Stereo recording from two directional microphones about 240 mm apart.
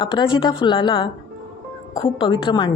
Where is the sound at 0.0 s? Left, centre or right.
Centre.